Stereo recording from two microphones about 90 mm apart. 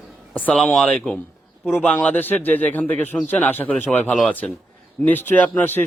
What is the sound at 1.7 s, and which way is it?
A man's voice, 20° left (ahead or behind).